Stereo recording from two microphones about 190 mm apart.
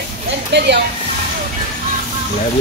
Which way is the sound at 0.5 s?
60° right (ahead or behind).